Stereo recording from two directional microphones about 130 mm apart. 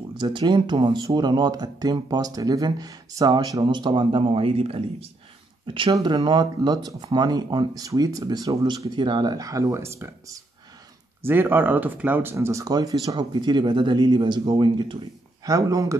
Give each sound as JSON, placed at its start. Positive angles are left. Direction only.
{"t": 0.2, "sound": "speech", "side_deg": -35}
{"t": 5.9, "sound": "speech", "side_deg": -30}